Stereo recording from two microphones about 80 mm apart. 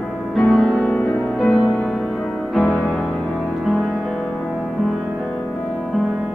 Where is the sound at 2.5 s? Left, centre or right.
Centre.